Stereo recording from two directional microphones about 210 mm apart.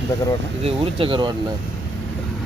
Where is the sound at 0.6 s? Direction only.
25° right (ahead or behind).